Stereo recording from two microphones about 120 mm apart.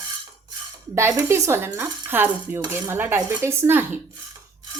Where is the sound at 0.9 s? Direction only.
20° right (ahead or behind).